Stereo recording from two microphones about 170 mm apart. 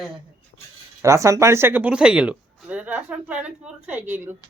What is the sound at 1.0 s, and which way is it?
Speech, 20° right (ahead or behind).